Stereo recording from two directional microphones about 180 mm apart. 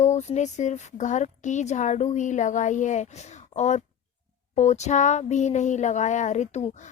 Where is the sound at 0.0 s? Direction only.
40° left (ahead or behind).